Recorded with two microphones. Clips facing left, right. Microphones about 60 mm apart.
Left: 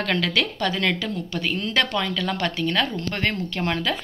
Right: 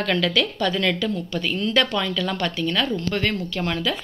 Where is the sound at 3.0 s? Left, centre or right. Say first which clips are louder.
Right 2 dB; left.